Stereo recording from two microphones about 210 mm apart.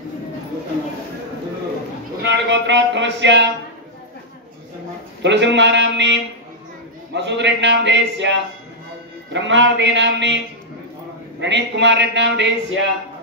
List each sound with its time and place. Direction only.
2.2 s speech: 55° right (ahead or behind)
5.2 s a man's voice: 55° right (ahead or behind)
7.2 s a man's voice: 55° right (ahead or behind)